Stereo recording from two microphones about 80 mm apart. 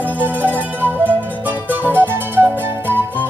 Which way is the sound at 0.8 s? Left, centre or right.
Right.